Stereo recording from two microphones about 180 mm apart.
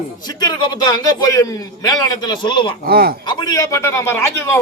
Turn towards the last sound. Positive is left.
turn(degrees=15)  # may be behind; listen again after turning